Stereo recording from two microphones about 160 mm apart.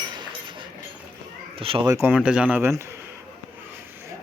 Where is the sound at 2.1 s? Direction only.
5° right (ahead or behind).